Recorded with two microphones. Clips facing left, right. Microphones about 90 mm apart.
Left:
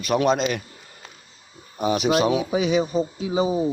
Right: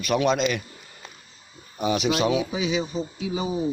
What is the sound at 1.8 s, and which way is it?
Speech, 45° left (ahead or behind).